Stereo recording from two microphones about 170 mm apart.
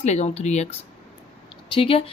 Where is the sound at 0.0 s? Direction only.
40° left (ahead or behind).